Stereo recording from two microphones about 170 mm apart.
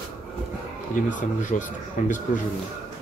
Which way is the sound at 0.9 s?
50° left (ahead or behind).